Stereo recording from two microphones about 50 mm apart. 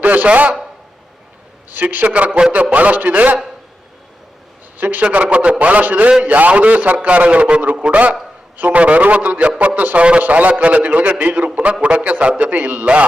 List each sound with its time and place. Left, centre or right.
0.0 s a man's voice: right
1.7 s a man's voice: right
4.8 s a man's voice: right